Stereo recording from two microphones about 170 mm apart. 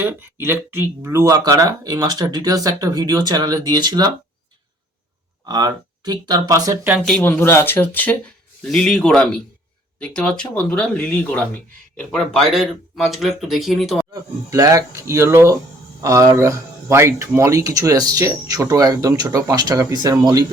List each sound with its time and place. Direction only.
0.0 s speech: 15° right (ahead or behind)
5.5 s speech: 25° right (ahead or behind)
7.0 s speech: 5° left (ahead or behind)
14.1 s speech: 20° right (ahead or behind)